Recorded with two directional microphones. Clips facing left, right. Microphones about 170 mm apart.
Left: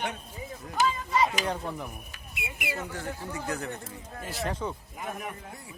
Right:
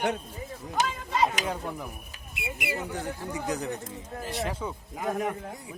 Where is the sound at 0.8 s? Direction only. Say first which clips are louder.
Left 3 dB; 60° right (ahead or behind).